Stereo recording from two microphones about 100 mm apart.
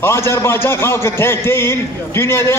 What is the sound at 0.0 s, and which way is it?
A man's voice, 25° left (ahead or behind).